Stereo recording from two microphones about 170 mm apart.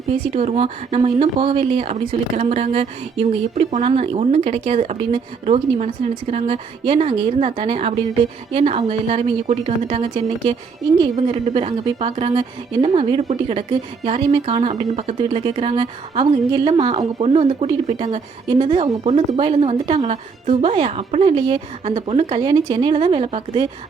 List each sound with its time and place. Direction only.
0.1 s a woman's voice: 40° right (ahead or behind)
10.8 s a woman's voice: centre (ahead or behind)
11.2 s a woman's voice: 35° right (ahead or behind)
17.2 s a woman's voice: 40° right (ahead or behind)